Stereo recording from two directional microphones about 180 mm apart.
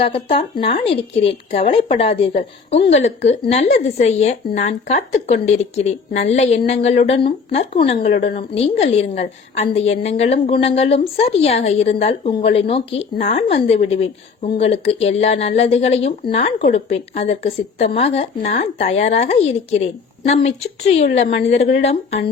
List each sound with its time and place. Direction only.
0.0 s a woman's voice: 30° left (ahead or behind); by 21.4 s 50° left (ahead or behind)
21.5 s a woman's voice: 40° left (ahead or behind)